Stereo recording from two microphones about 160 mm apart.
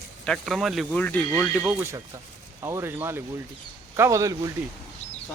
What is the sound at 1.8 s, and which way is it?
Speech, 15° right (ahead or behind).